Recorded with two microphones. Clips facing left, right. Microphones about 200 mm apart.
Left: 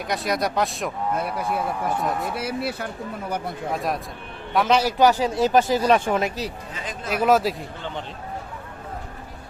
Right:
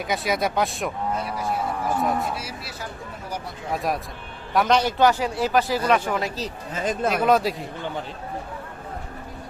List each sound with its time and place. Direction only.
0.0 s speech: centre (ahead or behind)
1.1 s speech: 55° left (ahead or behind)
2.0 s speech: centre (ahead or behind)
2.3 s speech: 55° left (ahead or behind)
3.7 s a man's voice: centre (ahead or behind); by 6.5 s 15° left (ahead or behind)
6.7 s speech: 45° right (ahead or behind)
7.1 s speech: centre (ahead or behind)